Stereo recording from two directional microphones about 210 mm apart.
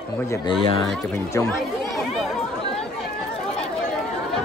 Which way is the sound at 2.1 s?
Centre (ahead or behind).